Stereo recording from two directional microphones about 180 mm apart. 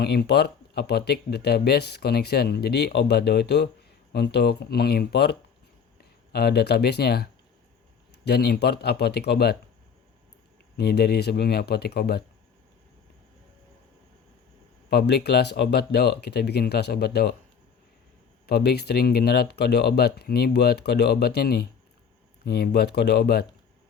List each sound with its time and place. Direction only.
0.0 s speech: 60° left (ahead or behind)
10.8 s speech: 60° left (ahead or behind)
14.8 s speech: 65° left (ahead or behind)
18.4 s speech: 60° left (ahead or behind)